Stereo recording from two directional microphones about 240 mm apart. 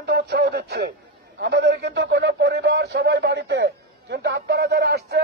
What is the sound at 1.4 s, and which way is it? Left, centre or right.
Speech, right.